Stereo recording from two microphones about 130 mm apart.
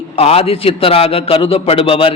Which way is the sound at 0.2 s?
50° left (ahead or behind).